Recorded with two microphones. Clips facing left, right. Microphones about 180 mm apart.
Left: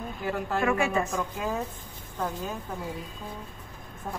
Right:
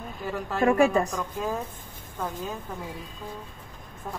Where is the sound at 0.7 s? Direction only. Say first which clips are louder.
Right 7 dB; 40° right (ahead or behind).